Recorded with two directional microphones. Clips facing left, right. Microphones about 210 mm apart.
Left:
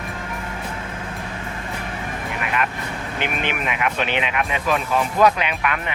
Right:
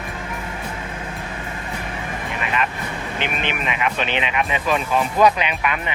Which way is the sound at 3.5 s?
10° left (ahead or behind).